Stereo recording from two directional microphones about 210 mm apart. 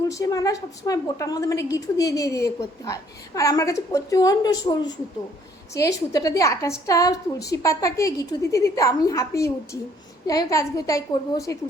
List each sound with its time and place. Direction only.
0.1 s a child's voice: 15° left (ahead or behind)